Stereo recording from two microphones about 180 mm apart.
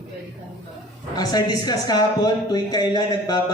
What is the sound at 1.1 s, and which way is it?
Speech, 20° left (ahead or behind).